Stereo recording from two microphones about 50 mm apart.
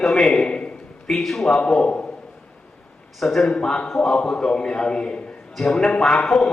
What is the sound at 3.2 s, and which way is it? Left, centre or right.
Speech, centre.